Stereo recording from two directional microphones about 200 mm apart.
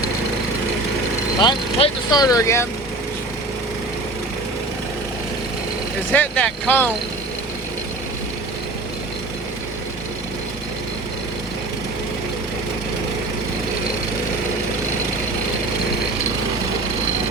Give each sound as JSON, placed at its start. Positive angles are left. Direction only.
{"t": 1.4, "sound": "speech", "side_deg": 20}
{"t": 6.1, "sound": "speech", "side_deg": 5}